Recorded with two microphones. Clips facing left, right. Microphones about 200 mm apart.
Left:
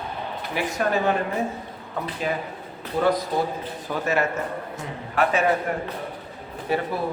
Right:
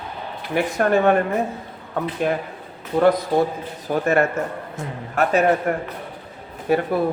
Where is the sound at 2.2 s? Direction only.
55° right (ahead or behind).